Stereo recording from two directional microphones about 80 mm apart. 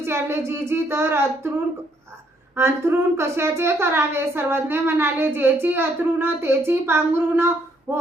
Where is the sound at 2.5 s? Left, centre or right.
Right.